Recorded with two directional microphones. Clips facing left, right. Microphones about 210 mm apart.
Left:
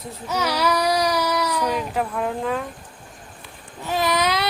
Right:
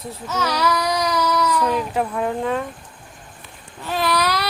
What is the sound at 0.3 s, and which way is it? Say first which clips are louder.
Child singing: even; 15° left (ahead or behind).